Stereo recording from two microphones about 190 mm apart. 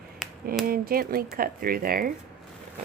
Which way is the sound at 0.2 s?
Centre (ahead or behind).